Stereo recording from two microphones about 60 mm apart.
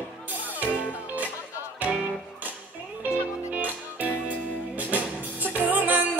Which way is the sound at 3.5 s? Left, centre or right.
Right.